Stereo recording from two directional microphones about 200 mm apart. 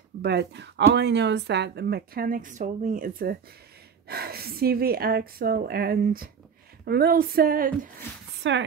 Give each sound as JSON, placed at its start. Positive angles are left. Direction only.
{"t": 0.2, "sound": "speech", "side_deg": -55}
{"t": 8.4, "sound": "speech", "side_deg": -65}